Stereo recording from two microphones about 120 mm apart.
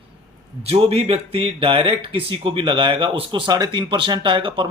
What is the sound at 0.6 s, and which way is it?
Speech, 55° right (ahead or behind).